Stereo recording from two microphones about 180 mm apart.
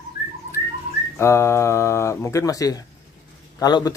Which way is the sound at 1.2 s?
15° left (ahead or behind).